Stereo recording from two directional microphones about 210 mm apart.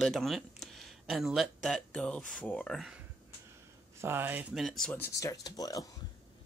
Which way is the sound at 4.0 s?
10° right (ahead or behind).